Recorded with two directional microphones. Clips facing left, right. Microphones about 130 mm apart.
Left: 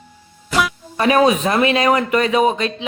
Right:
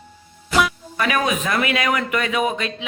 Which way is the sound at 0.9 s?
30° left (ahead or behind).